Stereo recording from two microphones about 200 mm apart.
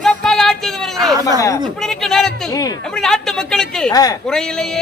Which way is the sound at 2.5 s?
15° left (ahead or behind).